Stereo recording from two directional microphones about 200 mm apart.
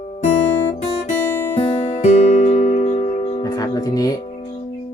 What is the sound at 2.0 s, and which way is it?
Music, 35° left (ahead or behind).